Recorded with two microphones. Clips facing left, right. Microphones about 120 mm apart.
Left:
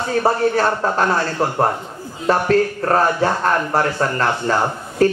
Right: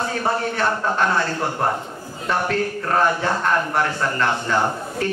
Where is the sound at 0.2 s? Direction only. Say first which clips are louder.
Left 7 dB; 40° left (ahead or behind).